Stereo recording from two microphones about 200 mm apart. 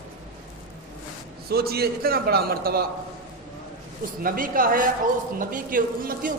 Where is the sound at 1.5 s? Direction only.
50° right (ahead or behind).